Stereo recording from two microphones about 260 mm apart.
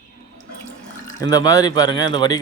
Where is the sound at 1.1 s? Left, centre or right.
Centre.